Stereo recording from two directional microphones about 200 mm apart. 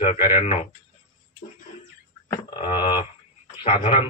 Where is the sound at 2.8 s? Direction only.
25° left (ahead or behind).